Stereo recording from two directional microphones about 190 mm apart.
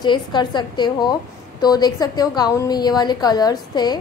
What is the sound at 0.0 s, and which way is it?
A woman's voice, 25° left (ahead or behind).